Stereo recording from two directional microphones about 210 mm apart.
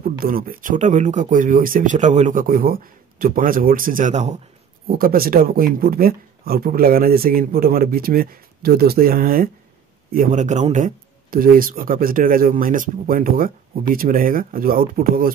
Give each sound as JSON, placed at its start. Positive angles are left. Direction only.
{"t": 0.0, "sound": "speech", "side_deg": -45}
{"t": 4.8, "sound": "speech", "side_deg": -45}